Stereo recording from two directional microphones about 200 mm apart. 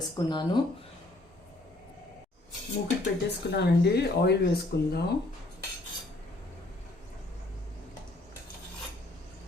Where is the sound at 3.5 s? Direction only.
55° left (ahead or behind).